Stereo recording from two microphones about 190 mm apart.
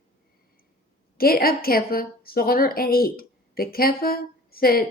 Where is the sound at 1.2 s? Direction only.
50° left (ahead or behind).